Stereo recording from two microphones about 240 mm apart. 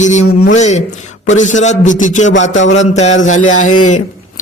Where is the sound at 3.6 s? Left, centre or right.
Left.